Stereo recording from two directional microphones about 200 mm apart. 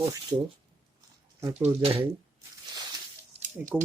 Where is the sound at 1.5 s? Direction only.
30° right (ahead or behind).